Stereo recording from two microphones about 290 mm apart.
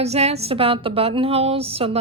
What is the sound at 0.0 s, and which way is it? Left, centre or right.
A woman's voice, right.